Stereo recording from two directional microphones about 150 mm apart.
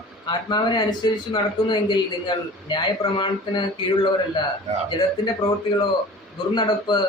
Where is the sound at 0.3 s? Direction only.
30° left (ahead or behind).